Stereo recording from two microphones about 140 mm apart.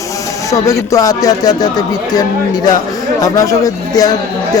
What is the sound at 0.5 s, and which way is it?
Speech, 25° left (ahead or behind).